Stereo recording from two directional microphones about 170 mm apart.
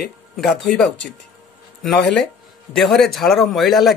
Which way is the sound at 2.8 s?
Centre (ahead or behind).